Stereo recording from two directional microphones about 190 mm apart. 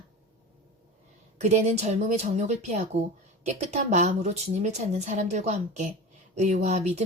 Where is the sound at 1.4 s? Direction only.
35° right (ahead or behind).